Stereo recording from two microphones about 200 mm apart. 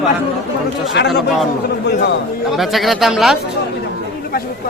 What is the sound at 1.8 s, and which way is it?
Speech, 55° left (ahead or behind).